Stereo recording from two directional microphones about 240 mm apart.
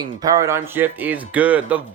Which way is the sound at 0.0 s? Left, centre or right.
Centre.